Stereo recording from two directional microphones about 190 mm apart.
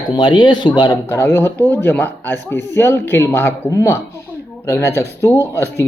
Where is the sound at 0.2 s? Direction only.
25° left (ahead or behind).